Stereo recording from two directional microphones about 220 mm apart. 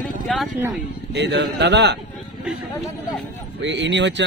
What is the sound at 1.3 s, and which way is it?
Speech, 50° right (ahead or behind).